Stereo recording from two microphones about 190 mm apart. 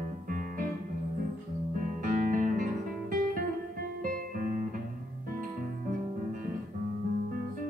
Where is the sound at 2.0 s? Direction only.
45° right (ahead or behind).